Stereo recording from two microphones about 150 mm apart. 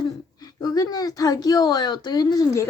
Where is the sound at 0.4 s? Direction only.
25° left (ahead or behind).